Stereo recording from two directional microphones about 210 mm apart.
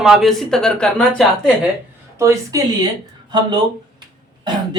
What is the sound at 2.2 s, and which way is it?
Speech, 15° right (ahead or behind).